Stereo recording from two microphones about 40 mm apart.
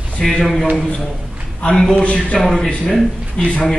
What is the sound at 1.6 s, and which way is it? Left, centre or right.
A man's voice, left.